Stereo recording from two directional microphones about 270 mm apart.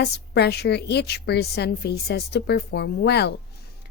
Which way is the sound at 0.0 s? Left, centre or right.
Left.